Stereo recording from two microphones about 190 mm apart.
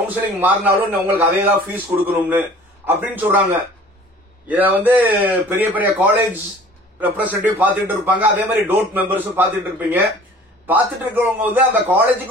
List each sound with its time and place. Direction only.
0.1 s a man's voice: 10° right (ahead or behind)
4.5 s a man's voice: 10° right (ahead or behind)